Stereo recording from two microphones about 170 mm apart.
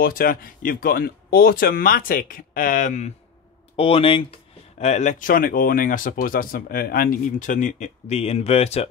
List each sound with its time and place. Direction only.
0.0 s speech: 60° left (ahead or behind)
3.7 s speech: 35° left (ahead or behind)
4.7 s speech: 40° left (ahead or behind)